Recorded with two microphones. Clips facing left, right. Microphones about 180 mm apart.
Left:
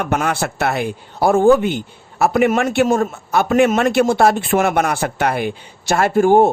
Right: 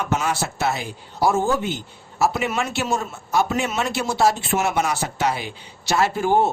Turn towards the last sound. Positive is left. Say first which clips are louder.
# left 7 dB
turn(degrees=50)  # may be behind; listen again after turning